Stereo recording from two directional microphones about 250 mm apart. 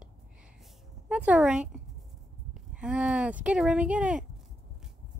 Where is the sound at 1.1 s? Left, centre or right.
Centre.